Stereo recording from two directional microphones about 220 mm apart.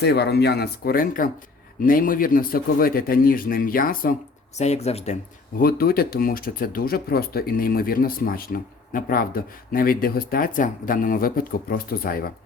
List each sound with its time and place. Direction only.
0.0 s speech: 50° left (ahead or behind)
4.5 s speech: 30° left (ahead or behind)
5.5 s speech: 40° left (ahead or behind)